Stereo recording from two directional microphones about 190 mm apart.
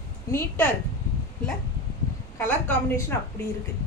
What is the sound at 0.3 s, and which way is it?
Speech, 10° left (ahead or behind).